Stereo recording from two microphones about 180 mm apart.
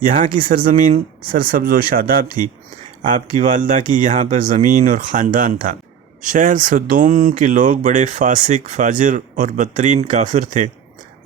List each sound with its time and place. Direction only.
0.0 s speech: 50° right (ahead or behind)